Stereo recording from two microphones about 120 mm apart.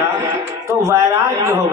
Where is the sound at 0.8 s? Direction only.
25° right (ahead or behind).